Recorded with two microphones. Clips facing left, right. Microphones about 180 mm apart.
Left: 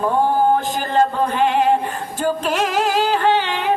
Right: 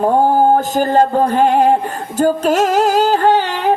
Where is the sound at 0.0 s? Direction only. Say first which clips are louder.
Right 5 dB; 45° right (ahead or behind).